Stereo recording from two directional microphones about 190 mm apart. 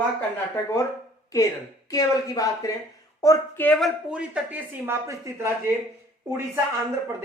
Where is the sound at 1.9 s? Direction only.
20° left (ahead or behind); by 5.5 s 15° right (ahead or behind).